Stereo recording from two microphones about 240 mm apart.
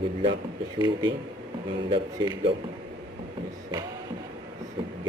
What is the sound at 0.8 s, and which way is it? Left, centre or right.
A man's voice, centre.